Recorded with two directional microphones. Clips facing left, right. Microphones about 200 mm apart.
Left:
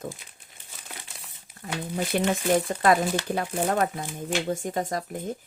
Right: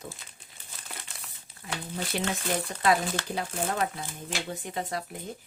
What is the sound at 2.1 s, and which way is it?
Speech, 50° left (ahead or behind).